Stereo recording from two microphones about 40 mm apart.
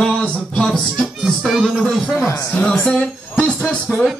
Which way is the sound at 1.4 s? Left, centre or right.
Centre.